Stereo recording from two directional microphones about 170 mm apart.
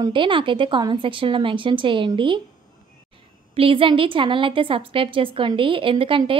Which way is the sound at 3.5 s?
30° right (ahead or behind).